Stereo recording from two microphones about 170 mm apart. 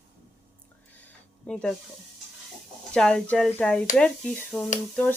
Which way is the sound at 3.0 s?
5° left (ahead or behind).